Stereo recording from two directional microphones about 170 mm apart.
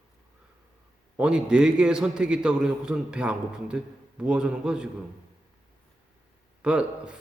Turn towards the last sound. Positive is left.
turn(degrees=-5)  # may be behind; listen again after turning